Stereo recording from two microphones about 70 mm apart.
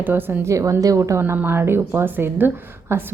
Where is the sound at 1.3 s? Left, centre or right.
Right.